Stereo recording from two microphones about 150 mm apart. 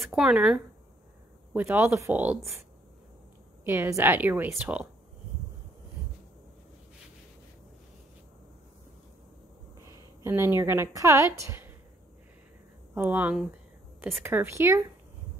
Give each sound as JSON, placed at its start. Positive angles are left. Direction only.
{"t": 0.0, "sound": "a woman's voice", "side_deg": -5}
{"t": 3.6, "sound": "a woman's voice", "side_deg": -15}
{"t": 9.8, "sound": "a woman's voice", "side_deg": -20}
{"t": 12.9, "sound": "a woman's voice", "side_deg": -10}